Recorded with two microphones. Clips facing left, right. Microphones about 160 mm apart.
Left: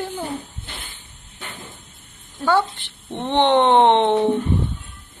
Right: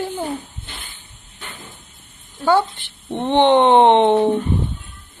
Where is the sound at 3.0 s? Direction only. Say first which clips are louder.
Right 3 dB; 10° right (ahead or behind).